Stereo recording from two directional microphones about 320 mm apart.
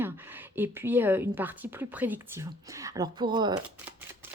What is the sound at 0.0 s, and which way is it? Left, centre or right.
A woman's voice, centre.